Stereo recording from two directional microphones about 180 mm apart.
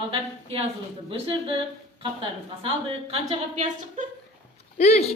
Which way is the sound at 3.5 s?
45° right (ahead or behind).